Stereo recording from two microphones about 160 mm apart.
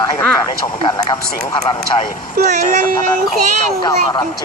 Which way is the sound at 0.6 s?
30° left (ahead or behind).